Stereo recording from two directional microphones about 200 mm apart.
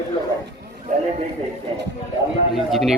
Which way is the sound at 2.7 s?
Centre (ahead or behind).